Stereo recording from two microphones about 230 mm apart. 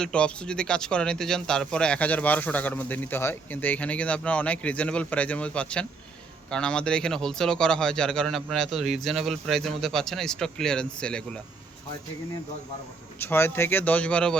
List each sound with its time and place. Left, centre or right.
0.0 s speech: centre
13.2 s speech: centre